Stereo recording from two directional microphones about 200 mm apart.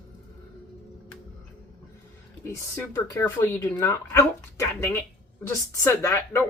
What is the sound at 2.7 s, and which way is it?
Speech, 10° left (ahead or behind).